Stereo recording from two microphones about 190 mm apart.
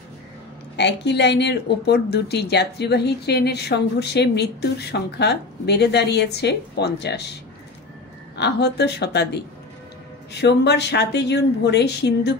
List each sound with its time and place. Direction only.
0.7 s speech: 65° left (ahead or behind)
8.4 s speech: 60° left (ahead or behind)
10.4 s speech: 65° left (ahead or behind)